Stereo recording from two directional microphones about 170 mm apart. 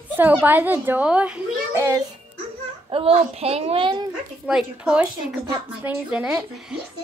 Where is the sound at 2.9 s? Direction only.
35° right (ahead or behind).